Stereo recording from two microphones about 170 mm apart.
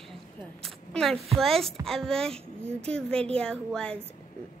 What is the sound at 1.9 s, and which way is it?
A woman's voice, 5° left (ahead or behind).